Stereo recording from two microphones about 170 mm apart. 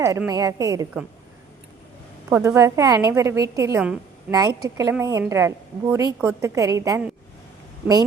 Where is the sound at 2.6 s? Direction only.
15° right (ahead or behind).